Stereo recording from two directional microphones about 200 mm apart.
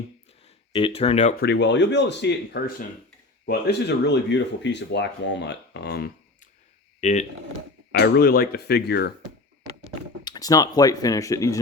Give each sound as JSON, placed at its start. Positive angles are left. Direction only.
{"t": 0.4, "sound": "speech", "side_deg": 25}
{"t": 1.4, "sound": "speech", "side_deg": 55}
{"t": 7.0, "sound": "speech", "side_deg": 35}
{"t": 7.9, "sound": "speech", "side_deg": 55}
{"t": 10.2, "sound": "speech", "side_deg": 20}